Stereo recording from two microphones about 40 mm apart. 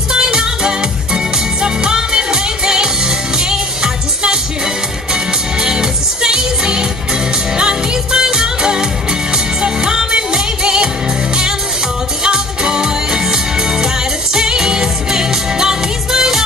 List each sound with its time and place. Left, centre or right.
0.1 s music: centre
12.2 s music: centre